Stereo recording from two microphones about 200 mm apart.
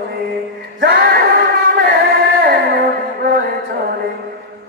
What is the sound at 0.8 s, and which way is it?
Singing, 50° right (ahead or behind).